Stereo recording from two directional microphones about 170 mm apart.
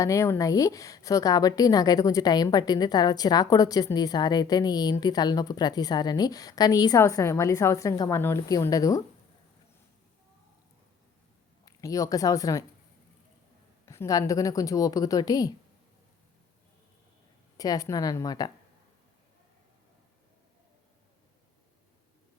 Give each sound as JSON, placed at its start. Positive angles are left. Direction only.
{"t": 0.0, "sound": "a woman's voice", "side_deg": 20}
{"t": 11.6, "sound": "speech", "side_deg": 20}
{"t": 13.8, "sound": "a woman's voice", "side_deg": 15}
{"t": 17.6, "sound": "a woman's voice", "side_deg": 20}